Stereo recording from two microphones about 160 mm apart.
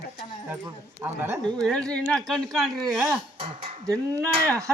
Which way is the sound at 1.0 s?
15° right (ahead or behind).